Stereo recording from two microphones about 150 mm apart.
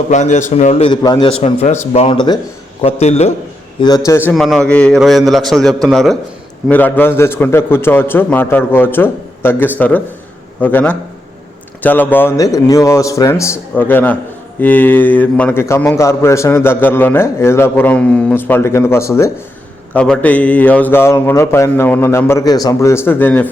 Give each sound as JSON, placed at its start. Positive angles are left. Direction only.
{"t": 0.1, "sound": "a man's voice", "side_deg": 55}
{"t": 0.9, "sound": "a man's voice", "side_deg": 30}
{"t": 2.1, "sound": "a man's voice", "side_deg": 30}
{"t": 2.8, "sound": "a man's voice", "side_deg": 45}
{"t": 3.8, "sound": "speech", "side_deg": 30}
{"t": 4.4, "sound": "a man's voice", "side_deg": 0}